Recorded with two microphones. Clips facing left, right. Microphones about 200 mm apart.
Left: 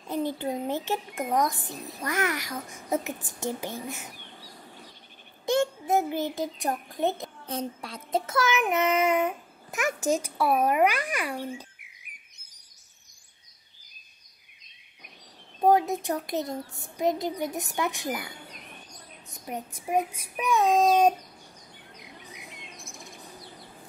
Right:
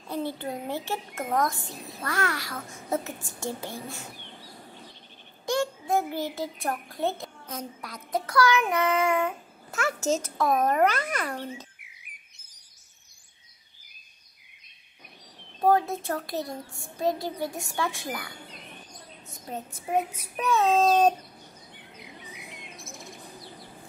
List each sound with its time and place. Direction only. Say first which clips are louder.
0.1 s a sound: left 2 dB; 15° left (ahead or behind)
0.7 s child singing: left 2 dB; 20° left (ahead or behind)
5.5 s a child's voice: left 2 dB; 20° left (ahead or behind)
7.4 s child singing: left 6 dB; 30° left (ahead or behind); by 11.6 s 10° left (ahead or behind)
15.6 s child singing: left 1 dB; 15° left (ahead or behind)
17.7 s speech: left 1 dB; 20° left (ahead or behind)
19.3 s child singing: left 1 dB; 15° left (ahead or behind)
22.0 s bird: right 2 dB; 5° right (ahead or behind)